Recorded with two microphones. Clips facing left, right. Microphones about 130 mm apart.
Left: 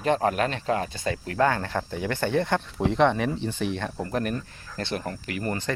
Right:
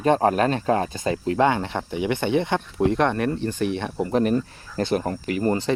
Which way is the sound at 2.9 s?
5° right (ahead or behind).